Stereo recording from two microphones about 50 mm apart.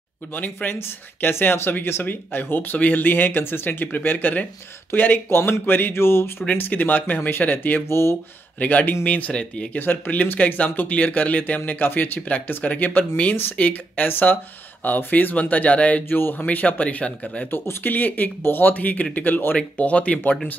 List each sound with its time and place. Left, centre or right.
0.3 s speech: left
0.7 s speech: left
5.3 s speech: left
6.5 s speech: left
7.2 s speech: left
7.9 s speech: left
8.5 s speech: left
9.3 s speech: centre
9.8 s speech: left
12.3 s speech: left
16.1 s speech: left
16.4 s speech: left
17.5 s speech: left
19.8 s speech: left